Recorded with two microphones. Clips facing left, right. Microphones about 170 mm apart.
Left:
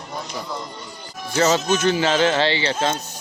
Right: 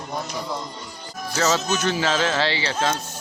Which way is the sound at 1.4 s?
30° left (ahead or behind).